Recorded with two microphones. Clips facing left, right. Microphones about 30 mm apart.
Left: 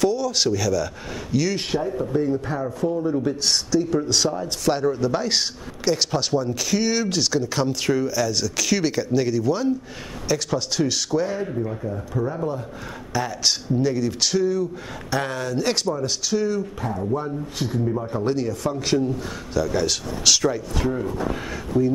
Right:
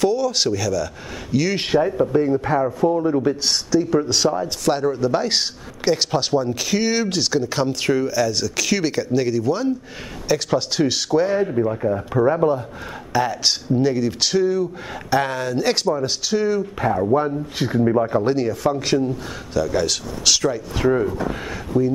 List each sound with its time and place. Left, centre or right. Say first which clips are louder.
0.0 s speech: right 2 dB; centre
1.5 s speech: right 4 dB; right
1.8 s speech: right 7 dB; right
2.1 s speech: right 4 dB; right
3.2 s speech: right 2 dB; centre
11.8 s speech: right 8 dB; right
13.1 s speech: right 4 dB; centre
16.8 s speech: right 11 dB; right; by 20.6 s centre
20.8 s speech: right 8 dB; right
21.2 s speech: right 1 dB; centre